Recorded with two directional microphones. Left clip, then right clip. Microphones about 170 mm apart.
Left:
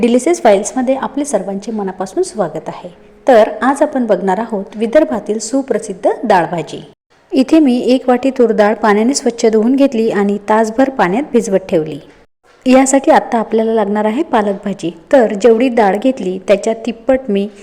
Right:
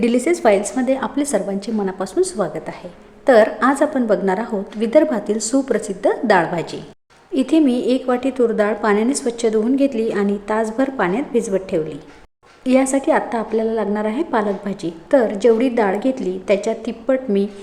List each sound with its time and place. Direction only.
0.0 s a woman's voice: 20° left (ahead or behind)
7.3 s a woman's voice: 30° left (ahead or behind)